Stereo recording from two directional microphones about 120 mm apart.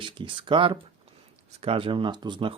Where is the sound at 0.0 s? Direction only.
45° right (ahead or behind).